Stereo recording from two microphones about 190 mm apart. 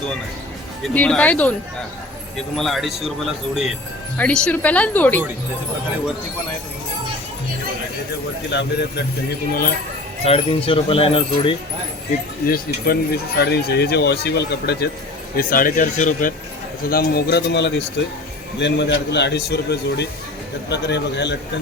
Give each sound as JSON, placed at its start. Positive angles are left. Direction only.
{"t": 0.9, "sound": "speech", "side_deg": 10}
{"t": 2.6, "sound": "speech", "side_deg": 0}
{"t": 8.4, "sound": "speech", "side_deg": 60}
{"t": 10.2, "sound": "speech", "side_deg": 30}
{"t": 12.5, "sound": "speech", "side_deg": 50}
{"t": 15.4, "sound": "speech", "side_deg": 50}
{"t": 16.9, "sound": "speech", "side_deg": 55}